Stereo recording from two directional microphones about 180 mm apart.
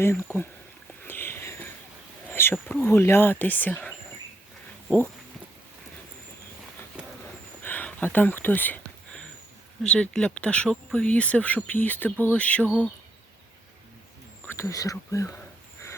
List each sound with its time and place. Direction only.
1.0 s boat: 10° left (ahead or behind)
2.3 s speech: 10° left (ahead or behind)
7.6 s a sound: 10° left (ahead or behind)
9.8 s speech: 5° left (ahead or behind)
14.4 s speech: 15° left (ahead or behind)